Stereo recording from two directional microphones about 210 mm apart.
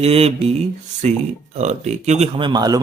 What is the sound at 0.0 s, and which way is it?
Speech, 30° right (ahead or behind).